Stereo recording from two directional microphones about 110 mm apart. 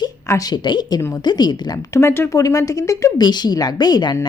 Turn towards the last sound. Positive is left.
turn(degrees=40)  # may be behind; listen again after turning